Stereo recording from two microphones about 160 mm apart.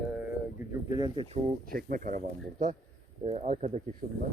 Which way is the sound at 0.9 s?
25° right (ahead or behind).